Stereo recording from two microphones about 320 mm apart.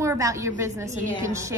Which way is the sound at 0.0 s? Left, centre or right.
Centre.